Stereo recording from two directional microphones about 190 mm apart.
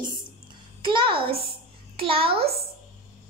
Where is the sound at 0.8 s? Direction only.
25° right (ahead or behind).